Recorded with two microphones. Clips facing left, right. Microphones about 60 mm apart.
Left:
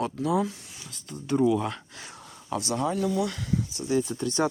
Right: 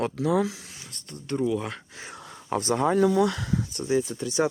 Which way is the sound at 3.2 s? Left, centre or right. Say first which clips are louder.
Right 4 dB; right.